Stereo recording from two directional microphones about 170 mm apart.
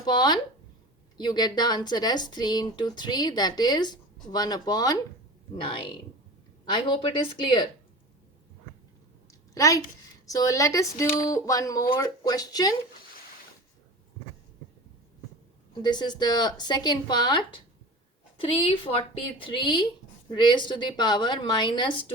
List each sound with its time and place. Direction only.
0.0 s speech: 25° left (ahead or behind)
6.7 s speech: 30° left (ahead or behind)
9.6 s speech: 20° left (ahead or behind)
15.7 s a woman's voice: 25° left (ahead or behind)